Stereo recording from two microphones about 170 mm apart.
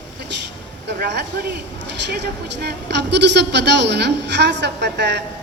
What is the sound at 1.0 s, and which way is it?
Speech, 80° right.